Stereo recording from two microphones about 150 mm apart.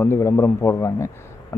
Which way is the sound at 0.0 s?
15° left (ahead or behind).